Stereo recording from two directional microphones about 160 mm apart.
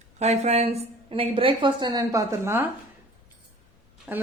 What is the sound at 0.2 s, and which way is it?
Speech, 45° right (ahead or behind).